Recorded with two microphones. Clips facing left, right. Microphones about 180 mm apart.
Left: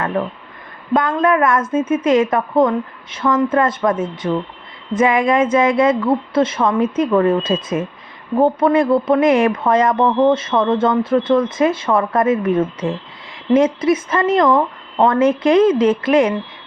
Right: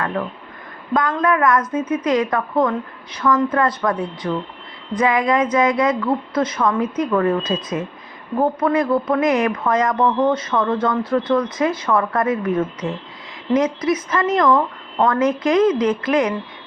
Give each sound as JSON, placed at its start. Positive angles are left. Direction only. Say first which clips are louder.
{"t": 0.2, "sound": "speech", "louder": "left 4 dB", "side_deg": 25}